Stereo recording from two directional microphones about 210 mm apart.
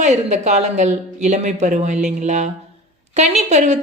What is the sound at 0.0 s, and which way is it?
Speech, 35° right (ahead or behind).